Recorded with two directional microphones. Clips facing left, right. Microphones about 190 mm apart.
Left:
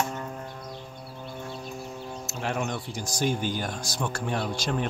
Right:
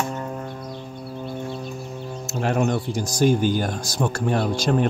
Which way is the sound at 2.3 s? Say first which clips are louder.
Right 9 dB; 45° right (ahead or behind).